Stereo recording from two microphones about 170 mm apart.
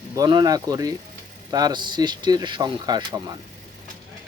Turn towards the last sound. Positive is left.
turn(degrees=-25)  # may be behind; listen again after turning